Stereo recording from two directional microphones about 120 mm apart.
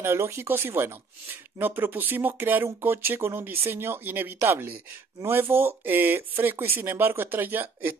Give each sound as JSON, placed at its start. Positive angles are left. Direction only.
{"t": 0.0, "sound": "speech", "side_deg": -20}